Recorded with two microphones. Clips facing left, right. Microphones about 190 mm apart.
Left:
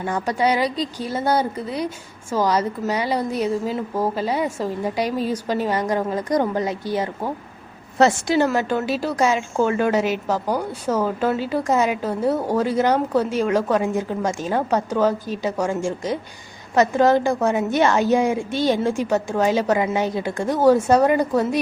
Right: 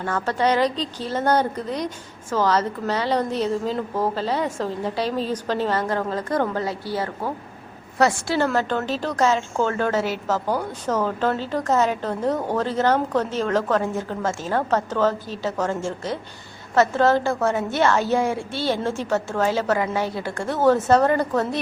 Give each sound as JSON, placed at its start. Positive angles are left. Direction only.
{"t": 0.0, "sound": "a woman's voice", "side_deg": 15}